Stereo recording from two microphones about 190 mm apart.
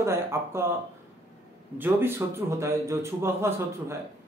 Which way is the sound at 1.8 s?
10° right (ahead or behind).